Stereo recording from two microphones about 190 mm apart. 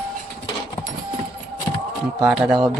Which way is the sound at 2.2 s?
5° right (ahead or behind).